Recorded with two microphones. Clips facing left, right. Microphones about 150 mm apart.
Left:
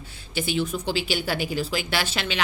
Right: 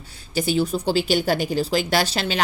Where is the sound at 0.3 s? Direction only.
40° right (ahead or behind).